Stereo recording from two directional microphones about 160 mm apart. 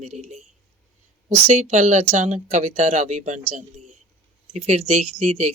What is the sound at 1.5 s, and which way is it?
Speech, 50° right (ahead or behind).